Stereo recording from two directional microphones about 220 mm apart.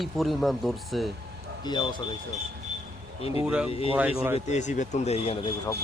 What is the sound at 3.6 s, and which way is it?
Speech, 25° left (ahead or behind).